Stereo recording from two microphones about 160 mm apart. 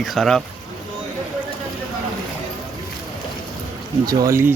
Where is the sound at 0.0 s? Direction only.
Centre (ahead or behind).